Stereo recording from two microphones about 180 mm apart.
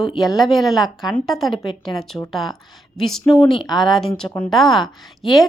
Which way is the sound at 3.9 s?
Centre (ahead or behind).